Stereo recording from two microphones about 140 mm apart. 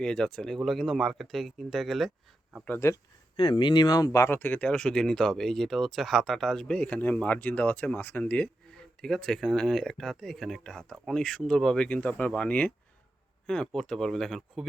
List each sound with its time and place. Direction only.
0.0 s speech: 5° left (ahead or behind)
2.6 s speech: 15° left (ahead or behind)
3.3 s speech: 35° left (ahead or behind); by 14.7 s centre (ahead or behind)